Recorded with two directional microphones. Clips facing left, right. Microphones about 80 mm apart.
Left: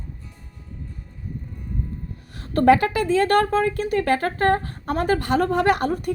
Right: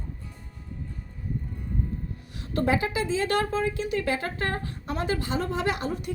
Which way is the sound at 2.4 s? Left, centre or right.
Left.